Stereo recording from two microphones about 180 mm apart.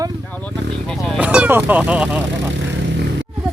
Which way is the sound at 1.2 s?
5° right (ahead or behind).